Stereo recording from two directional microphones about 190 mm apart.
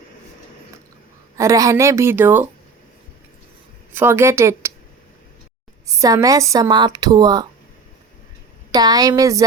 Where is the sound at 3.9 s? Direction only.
15° right (ahead or behind).